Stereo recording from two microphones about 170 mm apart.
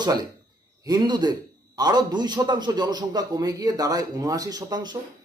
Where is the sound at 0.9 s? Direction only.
25° right (ahead or behind).